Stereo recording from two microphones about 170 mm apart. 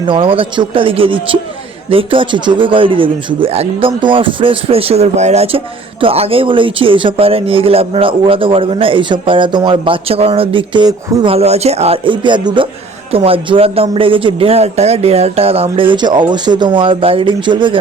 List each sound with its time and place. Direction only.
0.1 s a man's voice: 30° right (ahead or behind)